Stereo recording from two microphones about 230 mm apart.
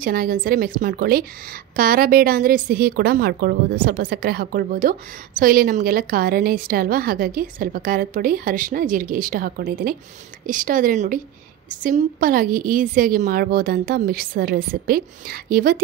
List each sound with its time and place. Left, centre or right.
0.0 s a woman's voice: right